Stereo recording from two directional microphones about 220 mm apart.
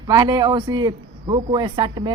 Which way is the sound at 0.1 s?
15° right (ahead or behind).